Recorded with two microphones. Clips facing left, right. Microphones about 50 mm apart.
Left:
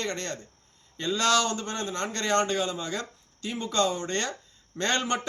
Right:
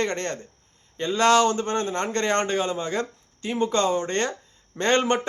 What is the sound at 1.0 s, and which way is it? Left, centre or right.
Speech, right.